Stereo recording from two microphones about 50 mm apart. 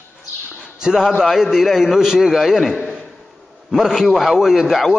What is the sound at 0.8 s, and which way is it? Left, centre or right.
A man's voice, centre.